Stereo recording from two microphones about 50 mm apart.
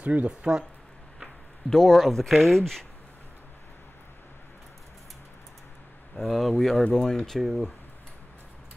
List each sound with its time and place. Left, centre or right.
0.0 s speech: right
1.7 s speech: centre
6.1 s speech: centre
7.3 s speech: centre